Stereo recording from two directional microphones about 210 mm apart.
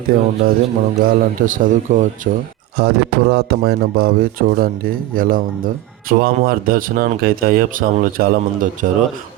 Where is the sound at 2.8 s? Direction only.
50° right (ahead or behind).